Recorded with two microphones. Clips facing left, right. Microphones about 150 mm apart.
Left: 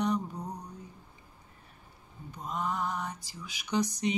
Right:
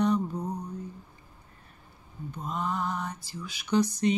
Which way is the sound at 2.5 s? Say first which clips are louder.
Right 2 dB; 15° left (ahead or behind).